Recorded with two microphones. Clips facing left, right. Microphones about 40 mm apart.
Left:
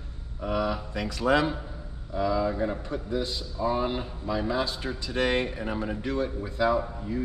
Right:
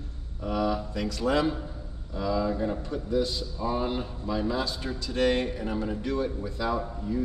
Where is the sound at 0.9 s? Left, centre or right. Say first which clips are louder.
Left 2 dB; left.